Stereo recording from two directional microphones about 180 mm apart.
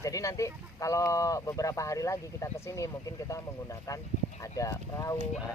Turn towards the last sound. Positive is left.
turn(degrees=20)  # may be behind; listen again after turning